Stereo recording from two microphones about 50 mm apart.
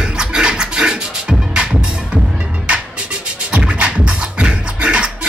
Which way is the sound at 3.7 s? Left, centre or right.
Right.